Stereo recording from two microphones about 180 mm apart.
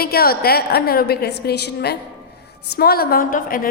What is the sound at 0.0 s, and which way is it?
A woman's voice, 60° left (ahead or behind).